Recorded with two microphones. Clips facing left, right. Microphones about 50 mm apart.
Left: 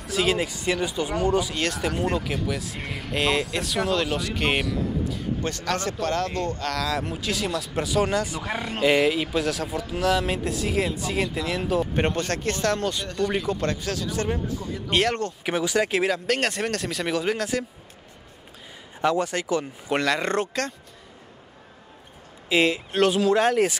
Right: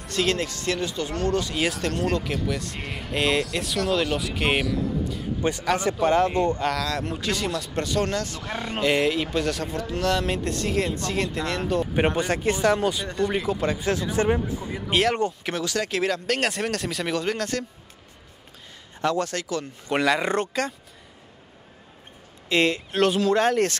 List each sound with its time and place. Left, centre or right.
0.0 s speech: centre
1.5 s speech: centre
1.8 s speech: centre
5.4 s speech: centre
6.7 s speech: centre
12.2 s speech: centre
13.8 s speech: right
14.9 s speech: centre
15.4 s speech: centre
18.9 s speech: centre
19.9 s speech: centre
22.5 s speech: centre